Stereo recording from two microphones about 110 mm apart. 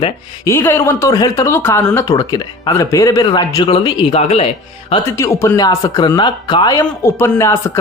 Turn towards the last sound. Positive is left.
turn(degrees=20)  # may be behind; listen again after turning